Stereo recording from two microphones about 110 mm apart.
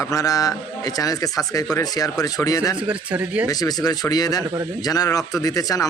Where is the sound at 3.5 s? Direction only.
35° left (ahead or behind).